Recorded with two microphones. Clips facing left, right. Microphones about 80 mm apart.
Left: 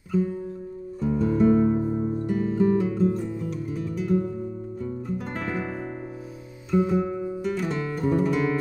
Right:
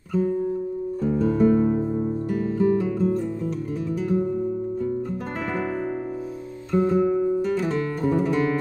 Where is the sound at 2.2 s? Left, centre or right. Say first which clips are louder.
Even; centre.